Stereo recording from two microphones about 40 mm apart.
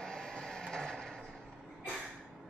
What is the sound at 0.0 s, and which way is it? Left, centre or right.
Vehicle, centre.